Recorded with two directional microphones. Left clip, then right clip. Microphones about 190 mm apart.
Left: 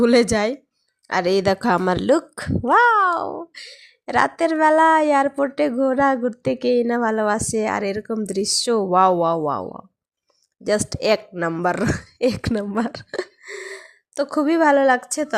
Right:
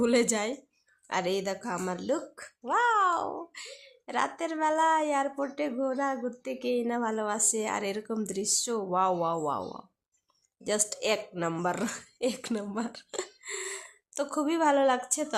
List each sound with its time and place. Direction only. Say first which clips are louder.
0.0 s speech: left 10 dB; 30° left (ahead or behind)